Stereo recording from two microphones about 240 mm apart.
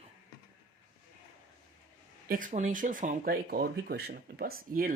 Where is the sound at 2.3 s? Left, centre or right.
Right.